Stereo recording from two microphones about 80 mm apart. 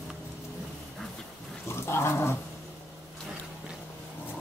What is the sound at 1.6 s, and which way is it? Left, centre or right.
Wild animals, left.